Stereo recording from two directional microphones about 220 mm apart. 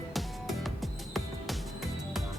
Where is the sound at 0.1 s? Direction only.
Centre (ahead or behind).